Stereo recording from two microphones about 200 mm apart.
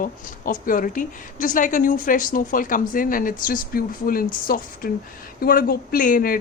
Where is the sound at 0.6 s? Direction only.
45° left (ahead or behind).